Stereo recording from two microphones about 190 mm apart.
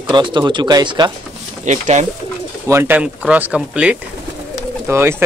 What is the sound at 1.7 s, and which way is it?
Speech, 40° right (ahead or behind).